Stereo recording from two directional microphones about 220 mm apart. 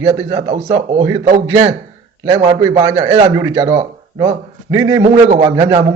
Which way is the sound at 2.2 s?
15° right (ahead or behind).